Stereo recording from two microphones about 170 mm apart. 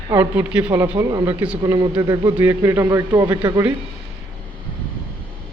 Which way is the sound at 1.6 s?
25° right (ahead or behind).